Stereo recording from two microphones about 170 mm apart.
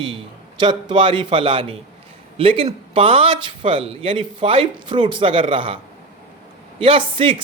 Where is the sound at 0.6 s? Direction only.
30° right (ahead or behind).